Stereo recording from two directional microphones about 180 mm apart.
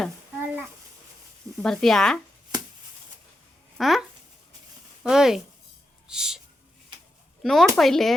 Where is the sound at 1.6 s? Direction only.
5° left (ahead or behind).